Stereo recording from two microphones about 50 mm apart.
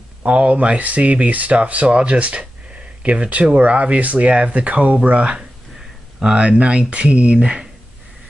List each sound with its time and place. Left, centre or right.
0.2 s speech: right